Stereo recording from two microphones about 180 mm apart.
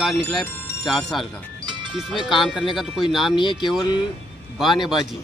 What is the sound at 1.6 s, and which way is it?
Music, 25° right (ahead or behind).